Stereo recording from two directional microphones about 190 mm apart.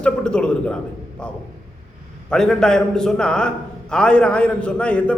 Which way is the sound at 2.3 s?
5° left (ahead or behind).